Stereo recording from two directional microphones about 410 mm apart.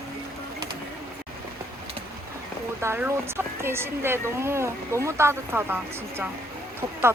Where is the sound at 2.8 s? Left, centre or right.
Centre.